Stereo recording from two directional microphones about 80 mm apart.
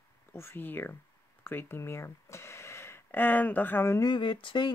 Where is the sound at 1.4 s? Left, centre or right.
Left.